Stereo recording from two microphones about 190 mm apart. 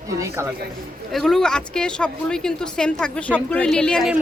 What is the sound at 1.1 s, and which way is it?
Speech, centre (ahead or behind).